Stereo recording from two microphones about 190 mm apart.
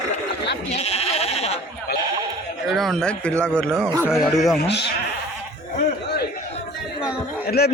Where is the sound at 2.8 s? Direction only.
5° left (ahead or behind).